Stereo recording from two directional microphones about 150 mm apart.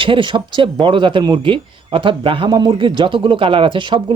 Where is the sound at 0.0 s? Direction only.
35° right (ahead or behind).